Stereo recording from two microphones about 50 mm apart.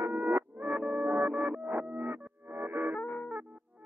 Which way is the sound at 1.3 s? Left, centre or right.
Centre.